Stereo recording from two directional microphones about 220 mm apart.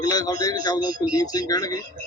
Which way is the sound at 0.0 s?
15° left (ahead or behind).